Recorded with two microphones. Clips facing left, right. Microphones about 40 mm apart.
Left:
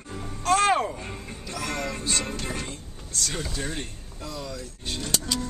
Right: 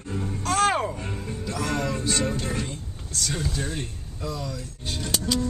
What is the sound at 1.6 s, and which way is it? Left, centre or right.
Music, centre.